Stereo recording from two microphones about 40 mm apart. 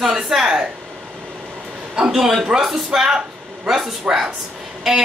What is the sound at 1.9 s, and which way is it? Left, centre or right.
Speech, centre.